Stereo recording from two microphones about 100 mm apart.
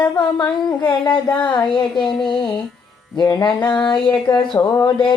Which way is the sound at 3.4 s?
50° left (ahead or behind).